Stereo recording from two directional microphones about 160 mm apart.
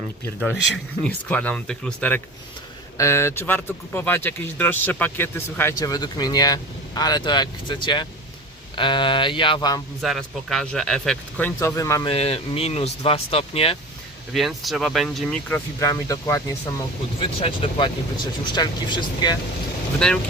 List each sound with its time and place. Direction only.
1.0 s speech: 10° left (ahead or behind); by 9.8 s 25° left (ahead or behind)
10.0 s speech: centre (ahead or behind); by 12.0 s 20° left (ahead or behind)
12.0 s speech: 40° left (ahead or behind)
14.3 s speech: centre (ahead or behind)
15.8 s speech: 20° left (ahead or behind)
17.2 s speech: 35° left (ahead or behind)
20.0 s speech: 5° left (ahead or behind)